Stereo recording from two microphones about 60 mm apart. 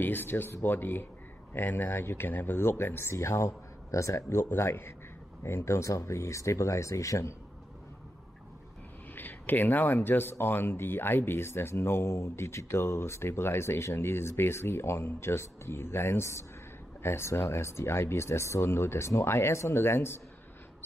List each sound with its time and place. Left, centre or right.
0.0 s speech: left
9.1 s a man's voice: left